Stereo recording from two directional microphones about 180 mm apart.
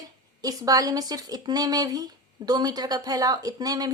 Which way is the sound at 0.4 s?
20° right (ahead or behind).